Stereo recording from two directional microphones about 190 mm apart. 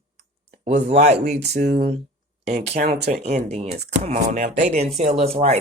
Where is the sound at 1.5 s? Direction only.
60° right (ahead or behind).